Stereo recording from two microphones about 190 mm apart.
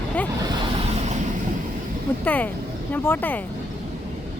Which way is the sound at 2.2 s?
10° left (ahead or behind).